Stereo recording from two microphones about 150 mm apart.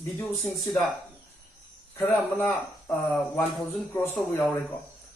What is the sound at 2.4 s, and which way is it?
Speech, 20° left (ahead or behind).